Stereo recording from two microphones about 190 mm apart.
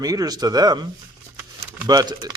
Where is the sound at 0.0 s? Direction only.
20° right (ahead or behind).